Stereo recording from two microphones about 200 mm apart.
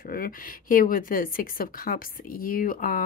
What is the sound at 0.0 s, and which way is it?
A woman's voice, 45° left (ahead or behind).